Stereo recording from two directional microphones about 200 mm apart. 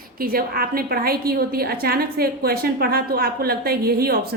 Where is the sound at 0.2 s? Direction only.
45° right (ahead or behind).